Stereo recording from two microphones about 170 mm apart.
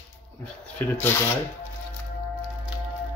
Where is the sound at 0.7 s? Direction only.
10° left (ahead or behind).